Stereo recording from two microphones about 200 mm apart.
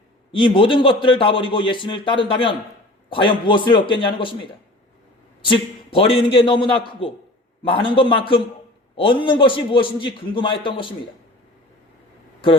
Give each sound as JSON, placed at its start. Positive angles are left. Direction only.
{"t": 0.3, "sound": "a man's voice", "side_deg": 25}
{"t": 5.9, "sound": "a man's voice", "side_deg": 25}